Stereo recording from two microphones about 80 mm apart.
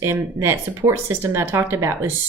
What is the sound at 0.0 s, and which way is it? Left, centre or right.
A woman's voice, right.